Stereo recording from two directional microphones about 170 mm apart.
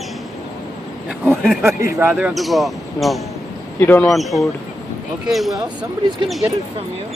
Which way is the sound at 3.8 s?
10° left (ahead or behind).